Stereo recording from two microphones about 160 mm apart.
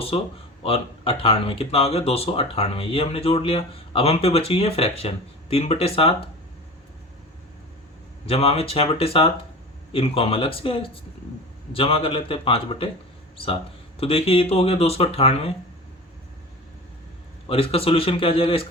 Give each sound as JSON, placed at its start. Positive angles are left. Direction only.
{"t": 0.1, "sound": "speech", "side_deg": 35}
{"t": 8.3, "sound": "speech", "side_deg": 40}
{"t": 17.5, "sound": "speech", "side_deg": 35}